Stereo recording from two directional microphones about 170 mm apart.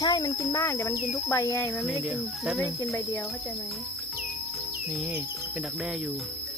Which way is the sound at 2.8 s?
20° left (ahead or behind).